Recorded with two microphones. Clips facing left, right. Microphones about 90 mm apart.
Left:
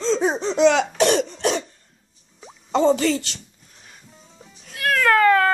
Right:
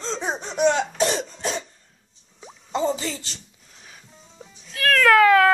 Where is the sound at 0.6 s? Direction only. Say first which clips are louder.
Left 4 dB; 90° left.